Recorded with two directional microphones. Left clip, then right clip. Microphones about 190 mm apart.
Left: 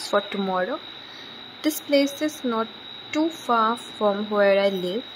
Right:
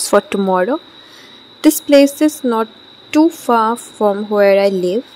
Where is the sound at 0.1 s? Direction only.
40° right (ahead or behind).